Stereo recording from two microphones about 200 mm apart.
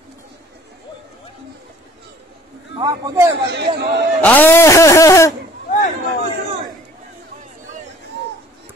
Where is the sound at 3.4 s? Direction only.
55° right (ahead or behind).